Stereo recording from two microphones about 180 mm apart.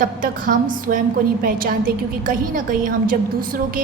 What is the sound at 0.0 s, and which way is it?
A woman's voice, 50° right (ahead or behind).